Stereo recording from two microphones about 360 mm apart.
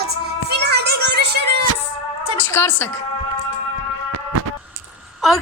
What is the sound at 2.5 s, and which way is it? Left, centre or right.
Speech, centre.